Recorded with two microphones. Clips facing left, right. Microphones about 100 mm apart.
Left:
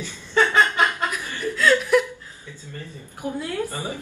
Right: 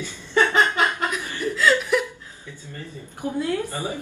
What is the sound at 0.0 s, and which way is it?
Laughter, 20° right (ahead or behind).